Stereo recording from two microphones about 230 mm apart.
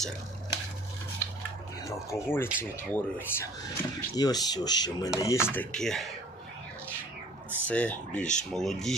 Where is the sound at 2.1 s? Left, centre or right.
Centre.